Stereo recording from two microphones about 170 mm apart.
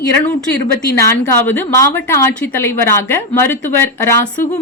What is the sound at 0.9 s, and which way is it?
A woman's voice, 15° left (ahead or behind).